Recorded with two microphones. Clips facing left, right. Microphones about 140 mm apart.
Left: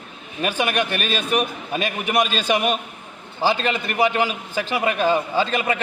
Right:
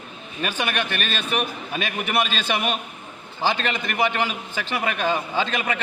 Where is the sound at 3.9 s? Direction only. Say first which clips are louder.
Left 3 dB; 10° left (ahead or behind).